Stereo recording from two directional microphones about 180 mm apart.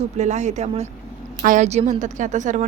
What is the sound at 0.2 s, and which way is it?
A woman's voice, 40° right (ahead or behind).